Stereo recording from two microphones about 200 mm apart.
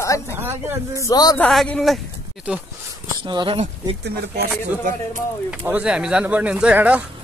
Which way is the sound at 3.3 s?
25° right (ahead or behind).